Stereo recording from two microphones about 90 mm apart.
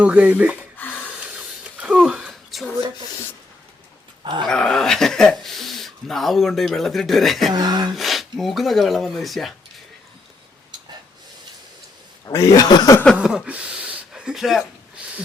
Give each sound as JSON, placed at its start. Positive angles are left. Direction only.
{"t": 0.0, "sound": "speech", "side_deg": -15}
{"t": 0.8, "sound": "snort", "side_deg": 20}
{"t": 1.2, "sound": "a sound", "side_deg": -15}
{"t": 2.3, "sound": "a sound", "side_deg": 0}
{"t": 4.2, "sound": "dog", "side_deg": -60}
{"t": 4.4, "sound": "speech", "side_deg": 5}
{"t": 7.5, "sound": "speech", "side_deg": -50}
{"t": 7.9, "sound": "speech", "side_deg": 0}
{"t": 12.2, "sound": "speech", "side_deg": 35}
{"t": 12.6, "sound": "speech", "side_deg": 50}
{"t": 13.2, "sound": "speech", "side_deg": -10}